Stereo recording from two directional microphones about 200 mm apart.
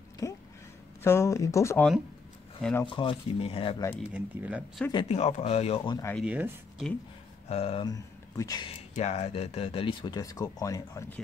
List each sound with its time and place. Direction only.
0.2 s a sound: 15° left (ahead or behind)
1.0 s speech: 15° left (ahead or behind)
2.8 s speech: 25° left (ahead or behind)
4.1 s speech: 5° right (ahead or behind)
4.9 s speech: 30° left (ahead or behind)
6.1 s speech: 5° right (ahead or behind)
7.4 s speech: 30° left (ahead or behind)
8.9 s speech: 35° left (ahead or behind); by 11.1 s 15° left (ahead or behind)